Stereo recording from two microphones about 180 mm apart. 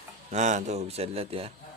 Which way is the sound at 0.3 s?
40° right (ahead or behind).